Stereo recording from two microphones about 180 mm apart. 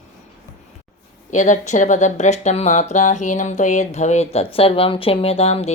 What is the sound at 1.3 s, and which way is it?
Speech, 40° left (ahead or behind).